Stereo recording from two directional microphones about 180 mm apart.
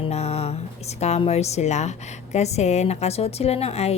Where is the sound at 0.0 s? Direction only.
35° left (ahead or behind).